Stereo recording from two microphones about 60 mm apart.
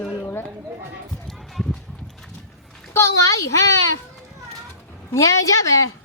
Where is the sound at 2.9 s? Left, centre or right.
Left.